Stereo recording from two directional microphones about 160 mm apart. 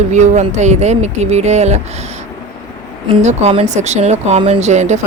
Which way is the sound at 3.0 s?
45° right (ahead or behind).